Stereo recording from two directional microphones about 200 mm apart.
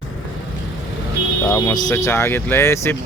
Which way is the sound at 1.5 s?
15° left (ahead or behind).